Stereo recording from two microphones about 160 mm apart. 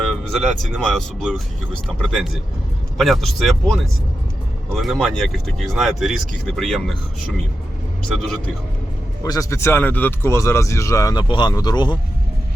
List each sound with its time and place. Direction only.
0.1 s speech: centre (ahead or behind)
2.0 s speech: centre (ahead or behind)
8.0 s speech: 5° left (ahead or behind)
9.2 s speech: 20° left (ahead or behind)